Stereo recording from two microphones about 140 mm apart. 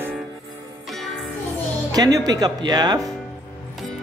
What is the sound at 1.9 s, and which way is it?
Speech, 25° right (ahead or behind).